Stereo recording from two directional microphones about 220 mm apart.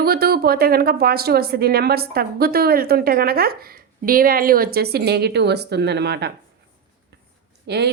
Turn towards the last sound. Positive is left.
turn(degrees=-50)  # may be behind; listen again after turning